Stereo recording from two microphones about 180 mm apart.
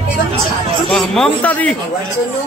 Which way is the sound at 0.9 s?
5° left (ahead or behind).